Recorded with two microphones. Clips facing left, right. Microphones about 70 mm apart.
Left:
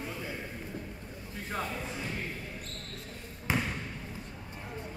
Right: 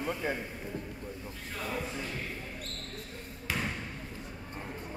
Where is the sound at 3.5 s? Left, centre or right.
Left.